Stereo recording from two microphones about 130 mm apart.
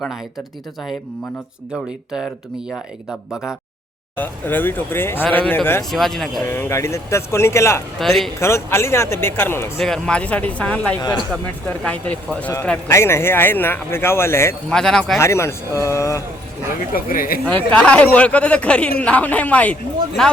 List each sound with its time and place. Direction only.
2.6 s speech: 5° right (ahead or behind)
4.2 s speech: 15° left (ahead or behind)
5.9 s speech: centre (ahead or behind)
6.4 s speech: 20° left (ahead or behind)
7.9 s speech: centre (ahead or behind)
8.4 s speech: 20° left (ahead or behind)
9.7 s speech: 5° left (ahead or behind); by 14.5 s 20° left (ahead or behind)
14.7 s speech: 5° left (ahead or behind)
15.2 s speech: 20° left (ahead or behind)
16.9 s speech: 90° left
17.4 s speech: 10° left (ahead or behind)